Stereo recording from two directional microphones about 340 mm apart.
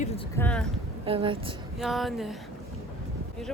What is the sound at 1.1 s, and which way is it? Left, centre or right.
Speech, centre.